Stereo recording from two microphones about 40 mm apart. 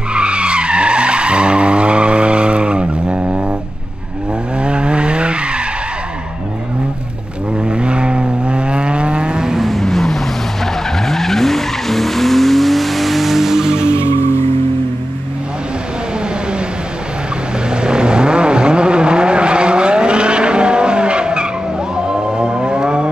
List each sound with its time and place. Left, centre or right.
0.1 s skidding: right
3.2 s vehicle: right
4.6 s skidding: right
7.6 s vehicle: right
9.5 s vehicle: centre
17.6 s vehicle: right
21.9 s music: right